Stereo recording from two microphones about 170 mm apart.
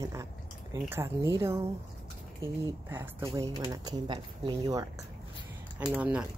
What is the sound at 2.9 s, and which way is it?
Speech, 15° right (ahead or behind).